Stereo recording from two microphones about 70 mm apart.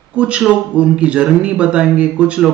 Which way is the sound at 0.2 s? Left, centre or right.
Centre.